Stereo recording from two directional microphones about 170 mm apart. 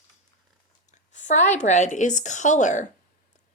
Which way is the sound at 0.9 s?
45° left (ahead or behind).